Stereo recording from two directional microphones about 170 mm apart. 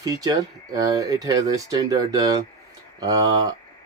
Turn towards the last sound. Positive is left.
turn(degrees=-20)  # may be behind; listen again after turning